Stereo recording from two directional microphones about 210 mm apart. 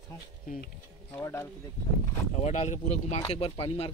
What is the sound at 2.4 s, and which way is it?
Speech, 35° left (ahead or behind).